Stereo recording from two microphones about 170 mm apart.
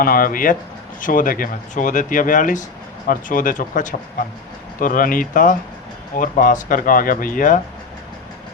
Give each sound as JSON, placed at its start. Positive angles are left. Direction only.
{"t": 0.0, "sound": "speech", "side_deg": 55}